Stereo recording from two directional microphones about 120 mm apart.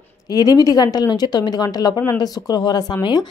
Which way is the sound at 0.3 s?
35° left (ahead or behind).